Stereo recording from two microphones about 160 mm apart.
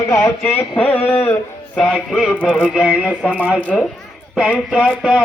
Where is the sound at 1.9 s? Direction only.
Centre (ahead or behind).